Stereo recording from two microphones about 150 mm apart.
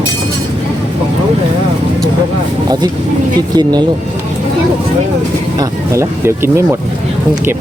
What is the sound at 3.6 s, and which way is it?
Speech, 30° right (ahead or behind).